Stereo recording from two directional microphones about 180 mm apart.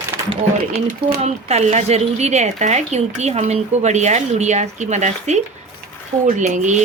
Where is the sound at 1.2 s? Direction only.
40° right (ahead or behind).